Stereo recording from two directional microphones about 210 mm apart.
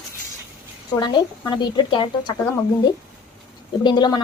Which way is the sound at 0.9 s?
20° left (ahead or behind).